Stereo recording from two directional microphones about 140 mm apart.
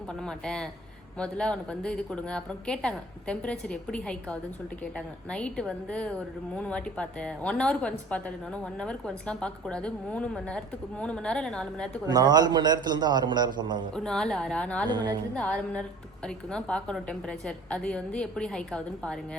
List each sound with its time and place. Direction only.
0.1 s a woman's voice: 5° left (ahead or behind)
12.0 s a man's voice: 30° right (ahead or behind)
13.9 s a woman's voice: 5° left (ahead or behind)
14.8 s a man's voice: 30° right (ahead or behind)
15.4 s a woman's voice: 10° left (ahead or behind)